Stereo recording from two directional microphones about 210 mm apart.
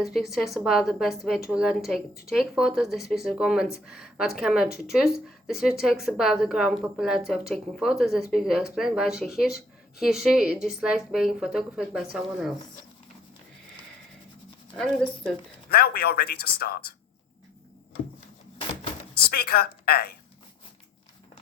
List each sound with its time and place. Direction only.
0.0 s a woman's voice: centre (ahead or behind)
15.7 s speech: 45° left (ahead or behind)
19.3 s speech: 45° left (ahead or behind)